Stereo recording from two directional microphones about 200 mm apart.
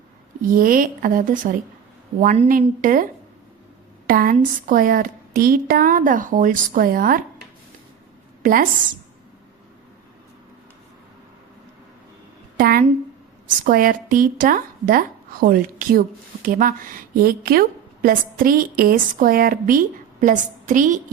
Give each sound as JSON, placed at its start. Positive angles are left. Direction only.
{"t": 0.4, "sound": "a woman's voice", "side_deg": -45}
{"t": 8.4, "sound": "a woman's voice", "side_deg": -45}
{"t": 12.5, "sound": "a sound", "side_deg": -45}
{"t": 13.5, "sound": "a woman's voice", "side_deg": -45}